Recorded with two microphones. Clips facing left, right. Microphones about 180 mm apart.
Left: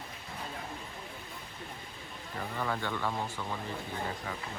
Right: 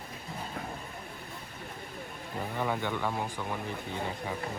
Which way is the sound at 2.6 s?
15° right (ahead or behind).